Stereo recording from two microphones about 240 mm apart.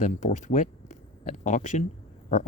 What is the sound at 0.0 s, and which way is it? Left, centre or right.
Speech, left.